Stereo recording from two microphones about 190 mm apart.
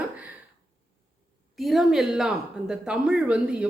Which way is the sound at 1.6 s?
Centre (ahead or behind).